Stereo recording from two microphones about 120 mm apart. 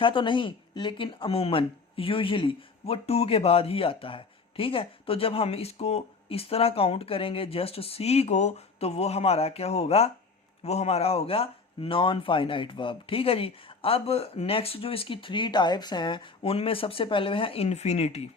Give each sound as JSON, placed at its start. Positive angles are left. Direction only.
{"t": 0.0, "sound": "speech", "side_deg": 45}